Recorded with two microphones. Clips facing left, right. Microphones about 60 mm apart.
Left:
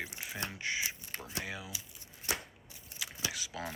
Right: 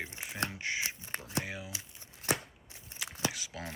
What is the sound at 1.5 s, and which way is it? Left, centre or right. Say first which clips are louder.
Speech: even; right.